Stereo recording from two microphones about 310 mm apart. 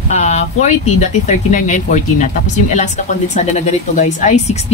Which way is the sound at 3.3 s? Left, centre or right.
Left.